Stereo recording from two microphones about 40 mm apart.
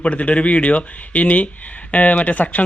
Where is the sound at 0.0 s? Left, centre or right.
Left.